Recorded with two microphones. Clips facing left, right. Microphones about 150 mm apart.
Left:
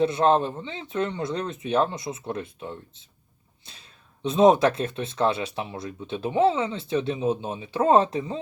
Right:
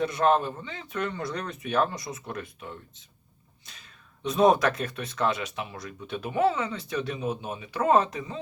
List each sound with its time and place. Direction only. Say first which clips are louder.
0.0 s speech: left 3 dB; 25° left (ahead or behind)